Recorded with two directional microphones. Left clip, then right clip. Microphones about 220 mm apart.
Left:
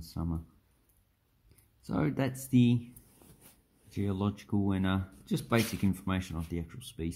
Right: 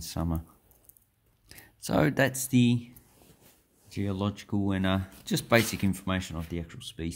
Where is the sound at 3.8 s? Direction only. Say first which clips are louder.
Right 2 dB; 5° right (ahead or behind).